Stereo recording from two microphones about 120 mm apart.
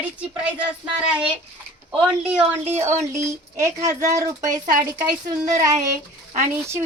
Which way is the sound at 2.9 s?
80° right.